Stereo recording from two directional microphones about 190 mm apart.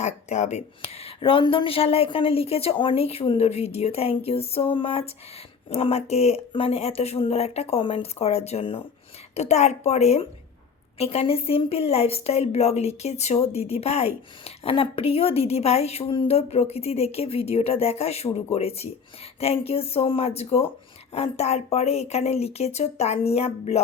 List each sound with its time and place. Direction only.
0.0 s speech: 35° left (ahead or behind)